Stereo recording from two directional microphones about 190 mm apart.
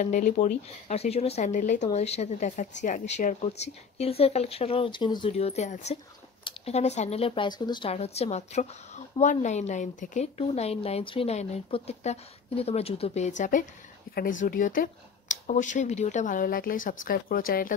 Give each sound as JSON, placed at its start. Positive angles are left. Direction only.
{"t": 0.0, "sound": "speech", "side_deg": 40}